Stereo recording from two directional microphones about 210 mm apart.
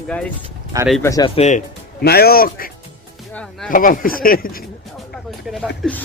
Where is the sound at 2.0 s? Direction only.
50° left (ahead or behind).